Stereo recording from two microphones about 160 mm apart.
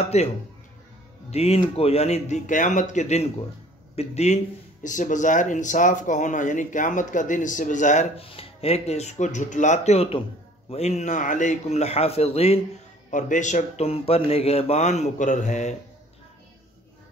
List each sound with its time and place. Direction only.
0.0 s speech: 40° left (ahead or behind)
1.3 s speech: 40° left (ahead or behind)
8.3 s speech: 35° left (ahead or behind)
13.1 s speech: 50° left (ahead or behind)